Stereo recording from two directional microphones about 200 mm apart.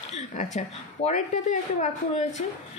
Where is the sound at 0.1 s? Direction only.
35° left (ahead or behind).